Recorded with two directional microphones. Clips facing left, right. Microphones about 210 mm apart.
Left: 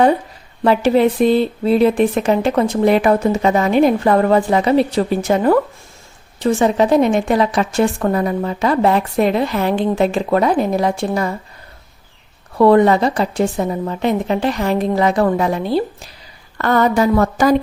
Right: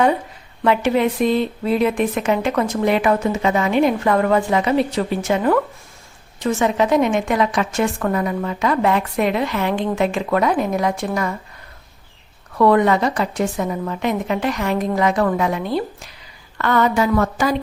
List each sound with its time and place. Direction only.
0.6 s speech: 35° left (ahead or behind)
12.5 s speech: 30° left (ahead or behind)